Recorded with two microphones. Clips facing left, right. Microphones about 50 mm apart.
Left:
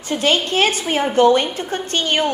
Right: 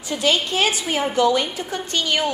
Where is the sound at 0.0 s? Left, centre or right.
Left.